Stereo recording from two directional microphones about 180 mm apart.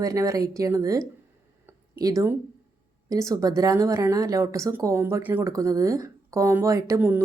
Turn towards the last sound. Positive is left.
turn(degrees=-15)  # may be behind; listen again after turning